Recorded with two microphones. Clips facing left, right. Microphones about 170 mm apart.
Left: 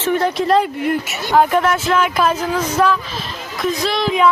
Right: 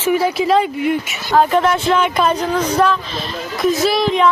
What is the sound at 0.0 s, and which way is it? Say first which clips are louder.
Speech: right 1 dB; 5° right (ahead or behind).